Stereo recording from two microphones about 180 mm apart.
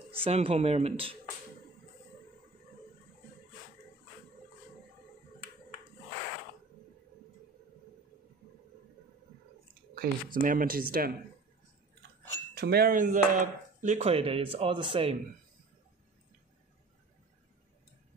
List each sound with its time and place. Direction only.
0.1 s speech: 30° right (ahead or behind)
9.9 s speech: 50° right (ahead or behind)
12.5 s speech: 60° right (ahead or behind); by 15.1 s 30° right (ahead or behind)